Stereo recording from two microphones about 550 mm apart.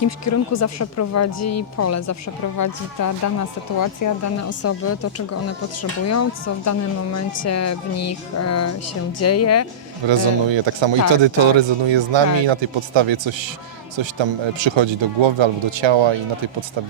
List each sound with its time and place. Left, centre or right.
0.3 s speech: left
10.1 s speech: right